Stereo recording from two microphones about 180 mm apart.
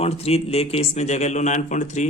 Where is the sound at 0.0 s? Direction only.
35° left (ahead or behind).